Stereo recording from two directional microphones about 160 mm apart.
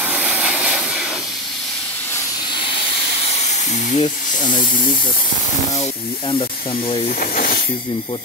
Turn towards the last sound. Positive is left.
turn(degrees=65)  # may be behind; listen again after turning